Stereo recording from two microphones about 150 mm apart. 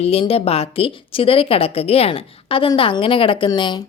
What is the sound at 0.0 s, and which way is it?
A woman's voice, 40° left (ahead or behind).